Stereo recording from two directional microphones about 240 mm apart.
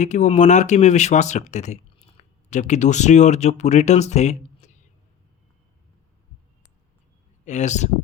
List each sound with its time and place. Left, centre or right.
0.0 s speech: left
7.4 s speech: left